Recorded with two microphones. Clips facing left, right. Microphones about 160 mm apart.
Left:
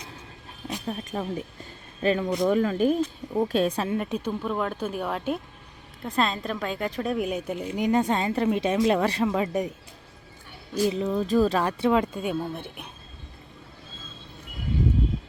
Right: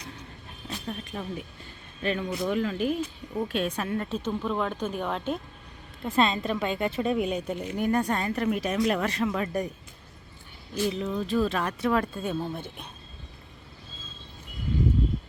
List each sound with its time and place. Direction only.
1.1 s speech: 45° left (ahead or behind)
3.8 s speech: 15° left (ahead or behind)
7.8 s speech: 20° left (ahead or behind)
10.8 s speech: 40° left (ahead or behind); by 12.9 s 10° left (ahead or behind)